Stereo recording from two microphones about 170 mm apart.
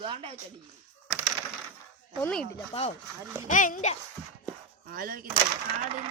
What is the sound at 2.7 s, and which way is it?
Speech, 35° left (ahead or behind).